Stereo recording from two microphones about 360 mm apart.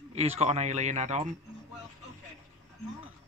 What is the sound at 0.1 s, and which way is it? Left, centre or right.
Speech, centre.